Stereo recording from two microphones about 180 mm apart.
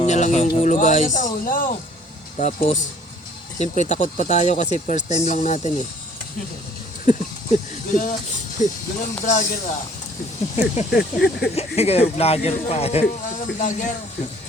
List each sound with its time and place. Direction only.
0.0 s speech: 40° left (ahead or behind)
7.0 s speech: 45° left (ahead or behind)
10.9 s speech: 65° left (ahead or behind)
11.5 s speech: 35° left (ahead or behind)